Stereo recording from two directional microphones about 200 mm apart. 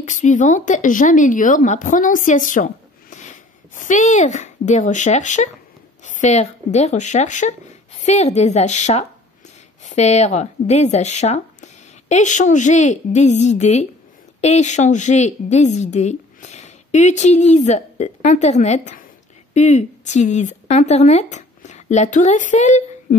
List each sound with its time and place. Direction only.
0.0 s a woman's voice: 35° left (ahead or behind)